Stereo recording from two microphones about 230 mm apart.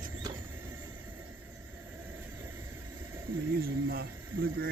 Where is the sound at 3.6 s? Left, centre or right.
Right.